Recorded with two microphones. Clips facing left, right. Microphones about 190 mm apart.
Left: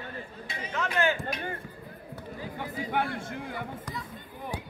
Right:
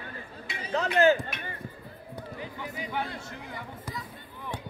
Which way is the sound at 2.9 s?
55° left (ahead or behind).